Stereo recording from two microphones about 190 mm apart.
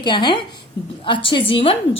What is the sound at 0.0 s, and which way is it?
A woman's voice, 25° left (ahead or behind).